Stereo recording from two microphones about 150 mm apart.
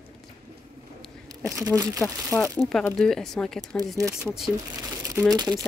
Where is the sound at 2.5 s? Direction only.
Centre (ahead or behind).